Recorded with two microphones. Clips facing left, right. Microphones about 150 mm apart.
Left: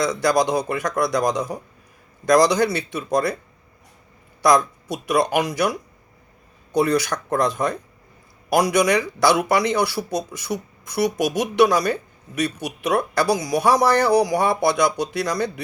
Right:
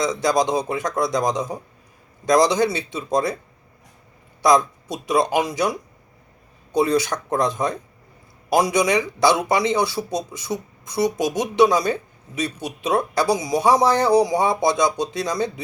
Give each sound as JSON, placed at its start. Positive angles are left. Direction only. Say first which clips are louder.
{"t": 0.0, "sound": "speech", "louder": "left 1 dB", "side_deg": -20}
{"t": 4.4, "sound": "speech", "louder": "even", "side_deg": -20}
{"t": 6.7, "sound": "speech", "louder": "even", "side_deg": -25}